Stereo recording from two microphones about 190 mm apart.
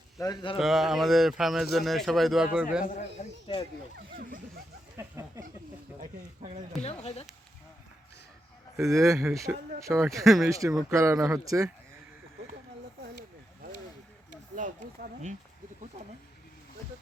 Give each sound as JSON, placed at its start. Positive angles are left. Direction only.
{"t": 0.2, "sound": "speech", "side_deg": 25}
{"t": 0.6, "sound": "speech", "side_deg": 0}
{"t": 3.9, "sound": "speech", "side_deg": -55}
{"t": 4.9, "sound": "a sound", "side_deg": -15}
{"t": 6.0, "sound": "speech", "side_deg": -40}
{"t": 6.8, "sound": "speech", "side_deg": 35}
{"t": 8.8, "sound": "speech", "side_deg": -15}
{"t": 10.2, "sound": "speech", "side_deg": 0}
{"t": 10.5, "sound": "speech", "side_deg": -15}
{"t": 14.5, "sound": "a sound", "side_deg": -40}